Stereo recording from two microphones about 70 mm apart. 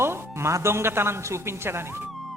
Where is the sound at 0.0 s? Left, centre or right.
Right.